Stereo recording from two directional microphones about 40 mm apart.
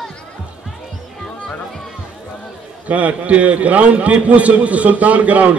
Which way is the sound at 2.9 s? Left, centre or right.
Right.